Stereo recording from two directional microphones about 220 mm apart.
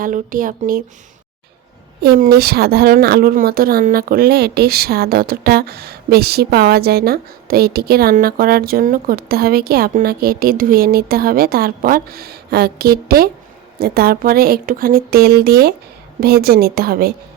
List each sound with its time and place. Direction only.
0.0 s speech: 40° right (ahead or behind)
2.0 s a woman's voice: 40° right (ahead or behind)